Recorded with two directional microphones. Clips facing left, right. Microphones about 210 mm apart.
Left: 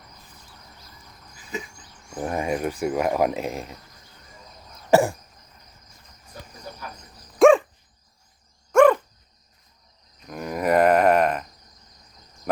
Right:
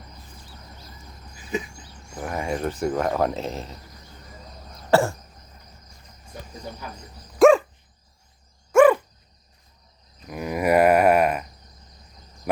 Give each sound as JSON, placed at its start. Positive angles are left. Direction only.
{"t": 2.2, "sound": "speech", "side_deg": 20}
{"t": 4.9, "sound": "cough", "side_deg": 15}
{"t": 7.3, "sound": "dog", "side_deg": 0}
{"t": 8.7, "sound": "dog", "side_deg": -10}
{"t": 10.2, "sound": "a sound", "side_deg": -5}